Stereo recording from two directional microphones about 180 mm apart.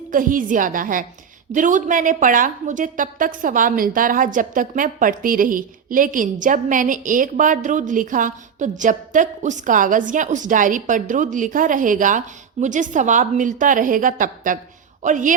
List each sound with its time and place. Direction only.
0.1 s a woman's voice: 50° right (ahead or behind)